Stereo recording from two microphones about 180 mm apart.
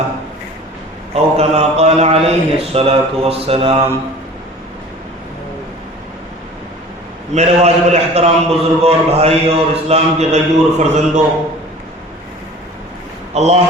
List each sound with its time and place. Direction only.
1.1 s a man's voice: 35° right (ahead or behind)
7.3 s a man's voice: 35° right (ahead or behind)
13.3 s a man's voice: 35° right (ahead or behind)